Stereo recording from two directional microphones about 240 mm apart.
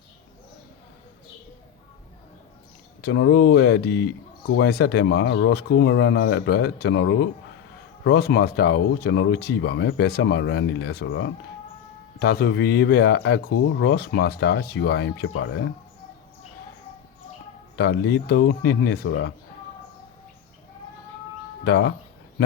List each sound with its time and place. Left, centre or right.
3.0 s speech: left
17.7 s speech: left
21.6 s speech: left